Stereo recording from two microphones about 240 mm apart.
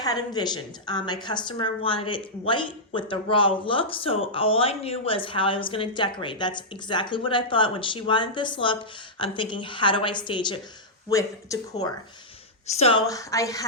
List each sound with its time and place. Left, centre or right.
0.0 s speech: centre